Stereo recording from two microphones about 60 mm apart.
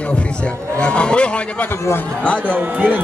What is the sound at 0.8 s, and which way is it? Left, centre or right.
Speech, centre.